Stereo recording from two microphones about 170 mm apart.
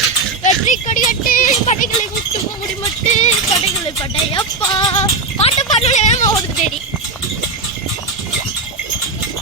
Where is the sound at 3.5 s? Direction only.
20° left (ahead or behind).